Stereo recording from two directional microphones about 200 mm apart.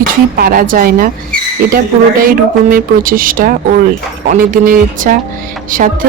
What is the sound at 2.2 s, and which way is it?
Speech, 45° right (ahead or behind).